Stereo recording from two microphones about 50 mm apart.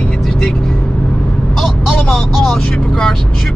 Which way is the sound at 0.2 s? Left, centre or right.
Centre.